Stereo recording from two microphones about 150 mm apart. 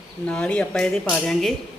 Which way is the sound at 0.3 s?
5° left (ahead or behind).